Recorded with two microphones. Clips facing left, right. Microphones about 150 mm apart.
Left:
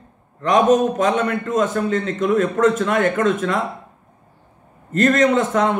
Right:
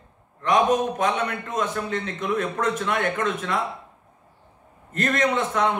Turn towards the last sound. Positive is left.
turn(degrees=45)  # may be behind; listen again after turning